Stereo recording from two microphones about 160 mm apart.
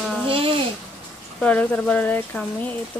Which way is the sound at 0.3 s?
35° right (ahead or behind).